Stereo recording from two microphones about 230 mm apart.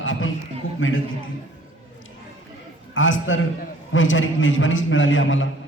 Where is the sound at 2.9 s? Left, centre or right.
Left.